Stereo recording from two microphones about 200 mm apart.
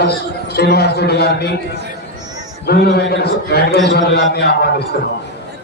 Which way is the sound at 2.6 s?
55° left (ahead or behind).